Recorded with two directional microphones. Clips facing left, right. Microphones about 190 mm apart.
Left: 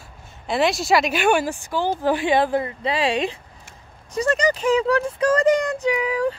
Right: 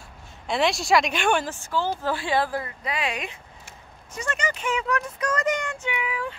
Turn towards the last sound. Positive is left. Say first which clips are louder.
# left 9 dB
turn(degrees=40)  # may be behind; listen again after turning